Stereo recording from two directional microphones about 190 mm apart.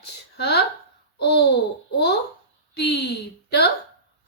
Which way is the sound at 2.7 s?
60° left (ahead or behind).